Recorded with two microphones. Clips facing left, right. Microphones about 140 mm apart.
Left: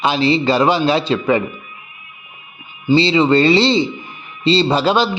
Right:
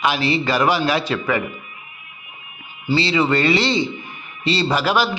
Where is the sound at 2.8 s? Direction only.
25° left (ahead or behind).